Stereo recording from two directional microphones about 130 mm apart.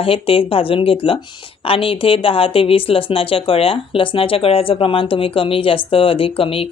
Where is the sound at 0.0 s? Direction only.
45° left (ahead or behind).